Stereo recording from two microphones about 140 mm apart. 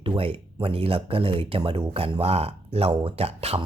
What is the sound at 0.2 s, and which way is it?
Speech, 40° right (ahead or behind).